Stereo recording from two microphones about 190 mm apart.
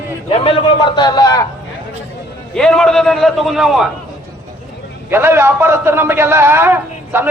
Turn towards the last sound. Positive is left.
turn(degrees=-10)  # may be behind; listen again after turning